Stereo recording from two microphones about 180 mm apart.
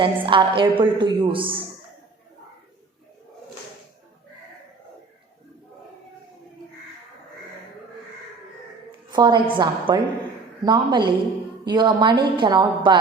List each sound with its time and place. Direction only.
0.0 s a woman's voice: 25° right (ahead or behind)
9.1 s a woman's voice: 25° right (ahead or behind)